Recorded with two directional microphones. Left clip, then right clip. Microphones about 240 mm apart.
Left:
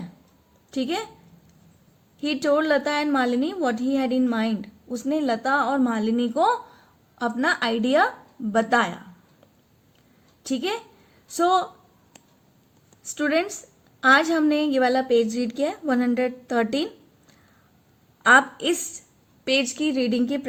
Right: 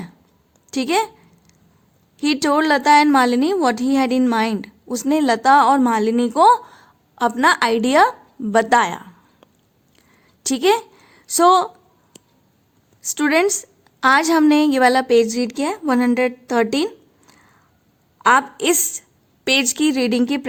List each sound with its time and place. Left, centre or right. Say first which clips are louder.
0.7 s a woman's voice: right 8 dB; right
2.1 s a woman's voice: right 4 dB; right
10.4 s a woman's voice: right 11 dB; right
13.0 s a woman's voice: right 6 dB; right